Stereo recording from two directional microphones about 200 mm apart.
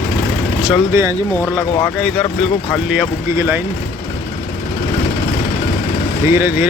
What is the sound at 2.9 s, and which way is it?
Speech, 5° right (ahead or behind).